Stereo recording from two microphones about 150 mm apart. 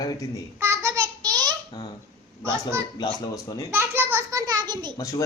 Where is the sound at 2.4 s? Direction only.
20° right (ahead or behind).